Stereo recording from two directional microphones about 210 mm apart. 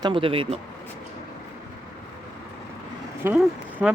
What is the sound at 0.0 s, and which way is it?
Speech, 25° right (ahead or behind).